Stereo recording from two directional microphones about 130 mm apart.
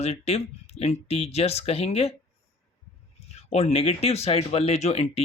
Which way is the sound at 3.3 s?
55° left (ahead or behind).